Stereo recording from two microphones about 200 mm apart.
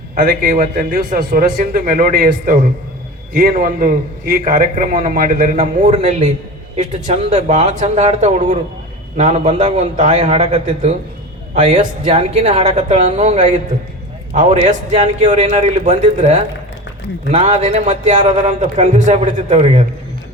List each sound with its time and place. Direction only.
0.2 s a man's voice: 40° right (ahead or behind)